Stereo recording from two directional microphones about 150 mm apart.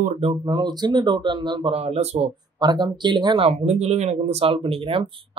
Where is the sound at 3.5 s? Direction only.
45° right (ahead or behind).